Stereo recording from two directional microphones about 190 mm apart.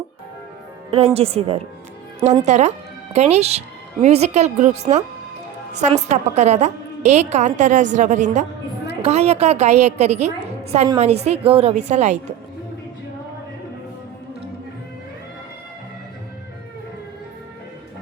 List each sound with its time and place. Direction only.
0.9 s a woman's voice: 30° right (ahead or behind)
6.1 s a woman's voice: 40° right (ahead or behind)